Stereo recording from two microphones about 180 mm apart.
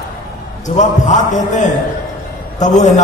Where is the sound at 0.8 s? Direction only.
40° left (ahead or behind).